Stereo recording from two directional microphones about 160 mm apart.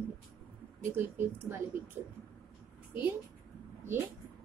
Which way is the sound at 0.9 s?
15° right (ahead or behind).